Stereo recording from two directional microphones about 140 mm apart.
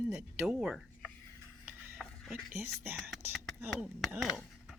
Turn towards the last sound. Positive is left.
turn(degrees=0)  # may be behind; listen again after turning